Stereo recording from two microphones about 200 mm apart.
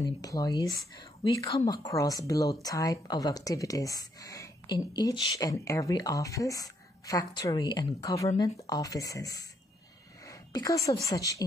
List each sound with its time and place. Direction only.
0.0 s a woman's voice: 20° left (ahead or behind)